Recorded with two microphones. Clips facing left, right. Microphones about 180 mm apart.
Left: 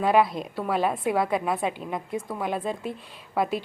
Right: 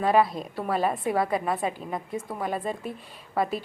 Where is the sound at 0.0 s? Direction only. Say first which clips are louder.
Left 1 dB; centre (ahead or behind).